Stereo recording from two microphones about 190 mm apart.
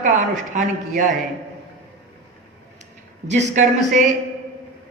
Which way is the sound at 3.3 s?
40° right (ahead or behind).